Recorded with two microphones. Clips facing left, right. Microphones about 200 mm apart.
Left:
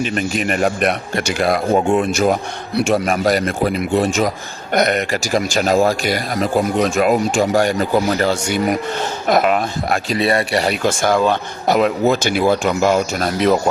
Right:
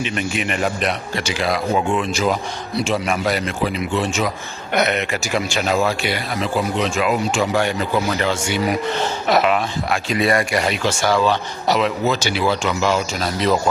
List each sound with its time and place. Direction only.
0.0 s speech: 40° left (ahead or behind)
10.2 s speech: 30° left (ahead or behind)
10.8 s speech: 50° left (ahead or behind)